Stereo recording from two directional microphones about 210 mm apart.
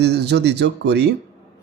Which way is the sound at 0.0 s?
55° right (ahead or behind).